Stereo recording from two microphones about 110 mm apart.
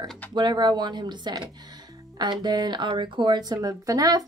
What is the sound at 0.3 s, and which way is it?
Speech, 40° right (ahead or behind).